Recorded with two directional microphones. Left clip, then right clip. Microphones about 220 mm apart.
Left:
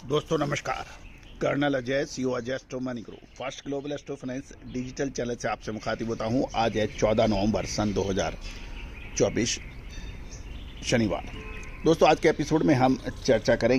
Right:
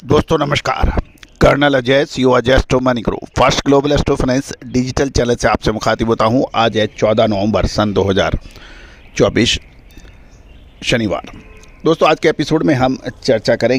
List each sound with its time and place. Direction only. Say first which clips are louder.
0.1 s speech: right 13 dB; 45° right (ahead or behind)
10.8 s speech: right 10 dB; 45° right (ahead or behind)